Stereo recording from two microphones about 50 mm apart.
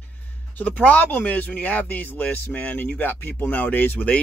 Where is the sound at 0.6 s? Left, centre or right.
Left.